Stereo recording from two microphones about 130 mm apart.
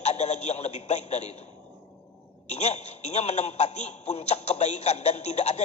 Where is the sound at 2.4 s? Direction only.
60° left (ahead or behind).